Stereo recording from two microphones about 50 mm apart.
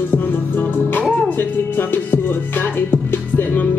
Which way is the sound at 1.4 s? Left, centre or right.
Left.